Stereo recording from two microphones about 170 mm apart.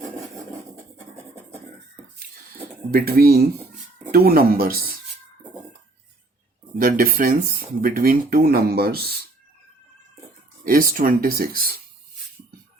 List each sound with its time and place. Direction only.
2.9 s speech: 60° right (ahead or behind)
6.7 s speech: 55° right (ahead or behind)
10.6 s speech: 60° right (ahead or behind)